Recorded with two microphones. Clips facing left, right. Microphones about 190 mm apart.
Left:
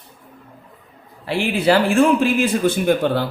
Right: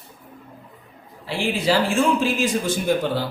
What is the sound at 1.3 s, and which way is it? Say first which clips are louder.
Speech: left 4 dB; 60° left (ahead or behind).